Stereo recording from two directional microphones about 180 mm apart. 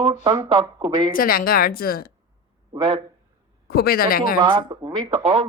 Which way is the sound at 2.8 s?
30° right (ahead or behind).